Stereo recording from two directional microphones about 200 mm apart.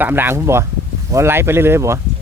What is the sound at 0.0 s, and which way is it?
Speech, 10° right (ahead or behind).